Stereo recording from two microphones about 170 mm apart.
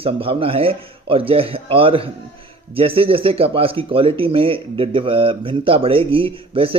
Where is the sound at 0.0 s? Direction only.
35° right (ahead or behind).